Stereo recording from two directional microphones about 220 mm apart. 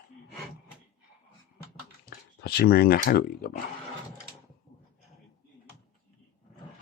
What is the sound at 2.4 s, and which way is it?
Speech, 45° left (ahead or behind).